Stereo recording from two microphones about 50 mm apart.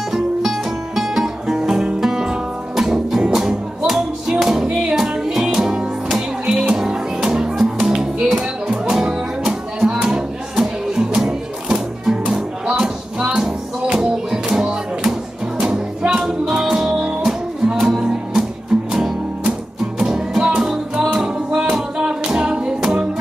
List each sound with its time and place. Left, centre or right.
0.1 s music: centre
13.2 s music: right